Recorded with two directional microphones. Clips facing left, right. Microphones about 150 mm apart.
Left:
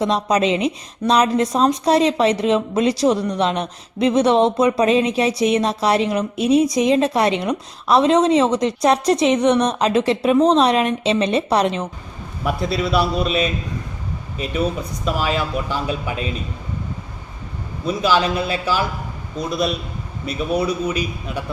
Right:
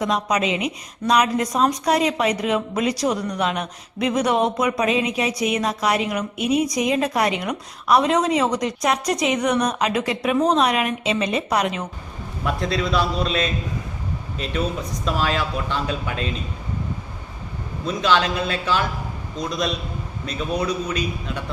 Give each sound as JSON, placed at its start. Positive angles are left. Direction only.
{"t": 0.0, "sound": "a woman's voice", "side_deg": 30}
{"t": 12.5, "sound": "speech", "side_deg": 5}
{"t": 17.8, "sound": "a man's voice", "side_deg": 5}